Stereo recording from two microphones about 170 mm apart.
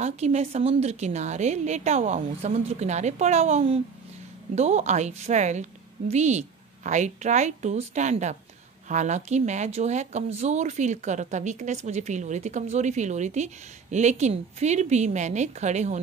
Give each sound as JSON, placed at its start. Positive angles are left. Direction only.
{"t": 0.0, "sound": "a woman's voice", "side_deg": -40}